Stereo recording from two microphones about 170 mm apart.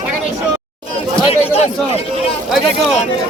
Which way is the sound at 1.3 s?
35° left (ahead or behind).